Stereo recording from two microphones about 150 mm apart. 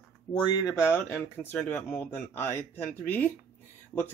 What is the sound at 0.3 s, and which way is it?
Speech, 25° left (ahead or behind).